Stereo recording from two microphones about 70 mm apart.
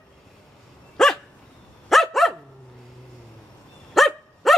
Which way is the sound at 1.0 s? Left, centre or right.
Centre.